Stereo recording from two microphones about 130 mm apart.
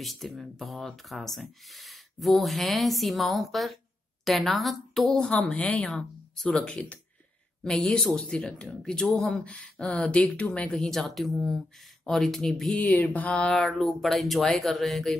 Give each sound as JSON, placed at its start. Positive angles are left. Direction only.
{"t": 0.0, "sound": "a woman's voice", "side_deg": 0}